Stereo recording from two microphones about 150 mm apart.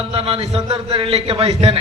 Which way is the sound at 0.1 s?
40° right (ahead or behind).